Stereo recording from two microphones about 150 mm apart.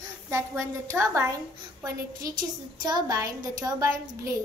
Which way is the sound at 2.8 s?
30° right (ahead or behind).